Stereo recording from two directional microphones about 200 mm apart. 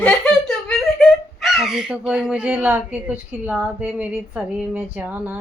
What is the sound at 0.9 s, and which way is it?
A woman's voice, centre (ahead or behind).